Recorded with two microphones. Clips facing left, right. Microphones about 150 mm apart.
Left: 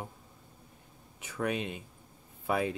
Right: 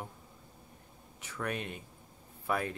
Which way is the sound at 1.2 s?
15° left (ahead or behind).